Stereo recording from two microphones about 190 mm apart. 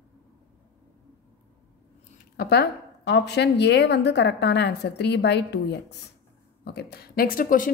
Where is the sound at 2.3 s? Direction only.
60° left (ahead or behind).